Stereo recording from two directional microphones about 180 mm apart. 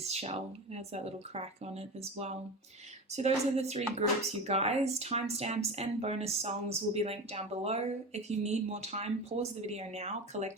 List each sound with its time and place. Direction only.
0.0 s speech: 35° right (ahead or behind)